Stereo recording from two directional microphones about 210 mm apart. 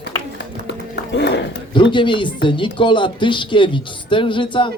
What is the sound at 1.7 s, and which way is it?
Speech, 20° left (ahead or behind).